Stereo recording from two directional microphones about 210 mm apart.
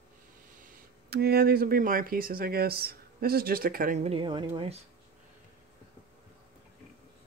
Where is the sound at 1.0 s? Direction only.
50° right (ahead or behind); by 4.5 s 25° right (ahead or behind).